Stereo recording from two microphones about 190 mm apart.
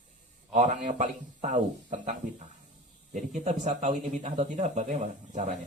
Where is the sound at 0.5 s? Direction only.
40° right (ahead or behind).